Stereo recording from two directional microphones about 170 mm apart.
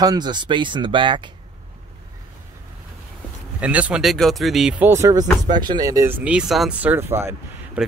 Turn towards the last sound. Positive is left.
turn(degrees=-15)  # may be behind; listen again after turning